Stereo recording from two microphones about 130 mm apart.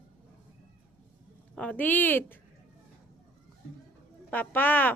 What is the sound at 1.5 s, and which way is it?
Speech, 10° left (ahead or behind).